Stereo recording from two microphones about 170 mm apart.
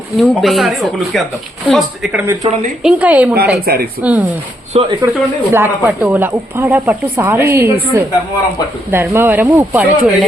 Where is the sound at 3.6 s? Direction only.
65° right (ahead or behind).